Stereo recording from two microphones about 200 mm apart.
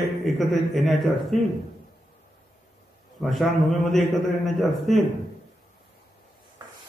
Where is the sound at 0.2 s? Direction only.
Centre (ahead or behind).